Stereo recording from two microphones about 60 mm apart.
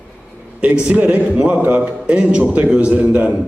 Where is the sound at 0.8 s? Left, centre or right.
Right.